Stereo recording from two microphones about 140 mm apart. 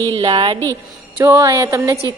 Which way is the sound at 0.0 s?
35° right (ahead or behind).